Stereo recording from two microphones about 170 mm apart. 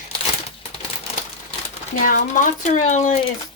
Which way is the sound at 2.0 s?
50° left (ahead or behind).